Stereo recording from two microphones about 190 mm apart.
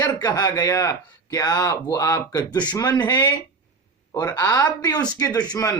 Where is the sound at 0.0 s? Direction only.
20° left (ahead or behind).